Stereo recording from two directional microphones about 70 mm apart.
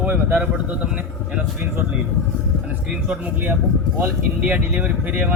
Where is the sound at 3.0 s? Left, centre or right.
Centre.